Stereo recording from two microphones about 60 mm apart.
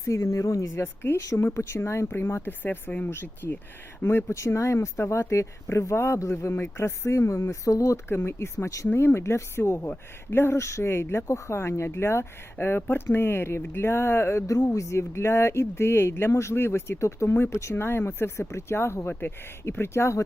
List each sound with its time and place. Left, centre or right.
0.0 s speech: left
1.1 s speech: left
7.5 s speech: left
8.1 s speech: left
14.7 s speech: left